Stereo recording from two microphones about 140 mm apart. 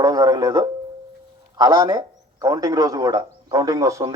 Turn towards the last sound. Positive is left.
turn(degrees=-25)  # may be behind; listen again after turning